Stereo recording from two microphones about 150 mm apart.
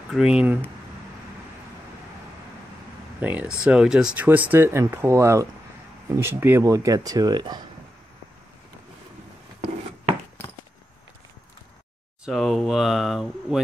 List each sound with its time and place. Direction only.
0.1 s speech: 5° right (ahead or behind)
3.2 s speech: 10° right (ahead or behind); by 7.6 s 25° right (ahead or behind)
12.3 s speech: centre (ahead or behind)